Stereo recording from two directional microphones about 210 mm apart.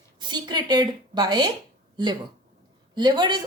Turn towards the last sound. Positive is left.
turn(degrees=-20)  # may be behind; listen again after turning